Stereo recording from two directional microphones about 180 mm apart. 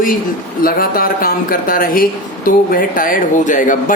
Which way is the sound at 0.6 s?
50° left (ahead or behind).